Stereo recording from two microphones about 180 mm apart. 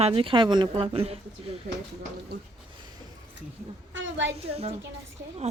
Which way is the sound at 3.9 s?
90° right.